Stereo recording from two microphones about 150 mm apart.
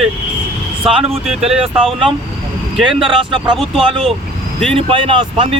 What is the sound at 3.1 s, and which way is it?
Speech, 30° right (ahead or behind).